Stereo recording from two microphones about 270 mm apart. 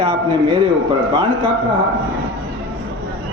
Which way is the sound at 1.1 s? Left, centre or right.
Centre.